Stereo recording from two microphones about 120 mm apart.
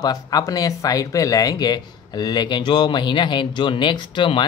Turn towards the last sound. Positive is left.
turn(degrees=40)  # may be behind; listen again after turning